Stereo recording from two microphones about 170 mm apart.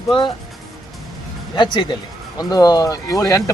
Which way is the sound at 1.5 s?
30° left (ahead or behind).